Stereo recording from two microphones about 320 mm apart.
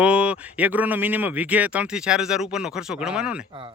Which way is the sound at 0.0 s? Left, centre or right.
Centre.